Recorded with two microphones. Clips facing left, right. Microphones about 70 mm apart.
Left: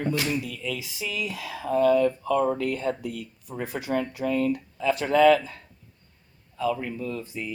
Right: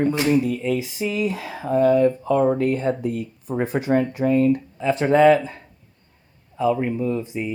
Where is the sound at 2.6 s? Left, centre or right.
Right.